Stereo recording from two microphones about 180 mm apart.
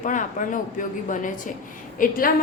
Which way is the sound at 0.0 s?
45° left (ahead or behind).